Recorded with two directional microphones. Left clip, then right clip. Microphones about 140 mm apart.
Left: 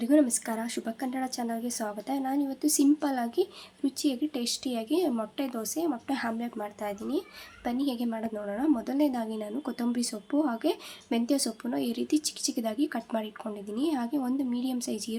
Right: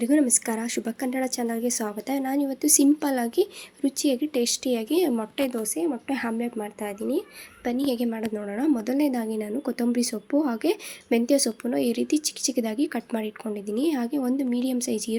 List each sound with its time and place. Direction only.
0.0 s a woman's voice: 20° right (ahead or behind)